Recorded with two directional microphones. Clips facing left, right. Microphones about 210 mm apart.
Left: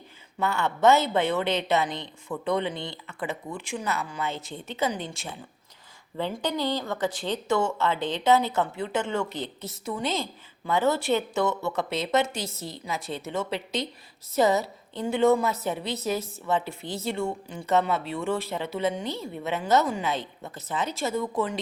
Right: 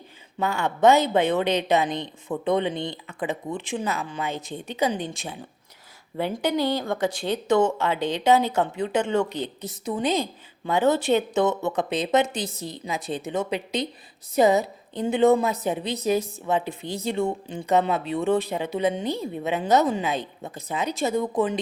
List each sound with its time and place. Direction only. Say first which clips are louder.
0.3 s a woman's voice: right 2 dB; 15° right (ahead or behind)